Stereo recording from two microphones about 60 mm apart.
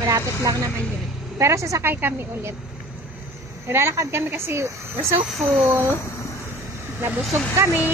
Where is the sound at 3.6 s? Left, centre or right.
Right.